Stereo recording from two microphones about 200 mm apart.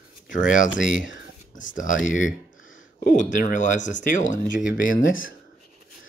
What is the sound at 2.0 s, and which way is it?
Speech, 40° left (ahead or behind).